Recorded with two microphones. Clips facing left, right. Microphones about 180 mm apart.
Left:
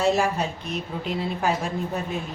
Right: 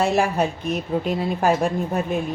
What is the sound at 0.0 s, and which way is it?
A woman's voice, 55° right (ahead or behind).